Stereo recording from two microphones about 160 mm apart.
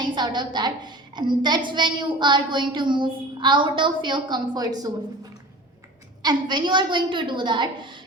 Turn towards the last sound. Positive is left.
turn(degrees=-30)  # may be behind; listen again after turning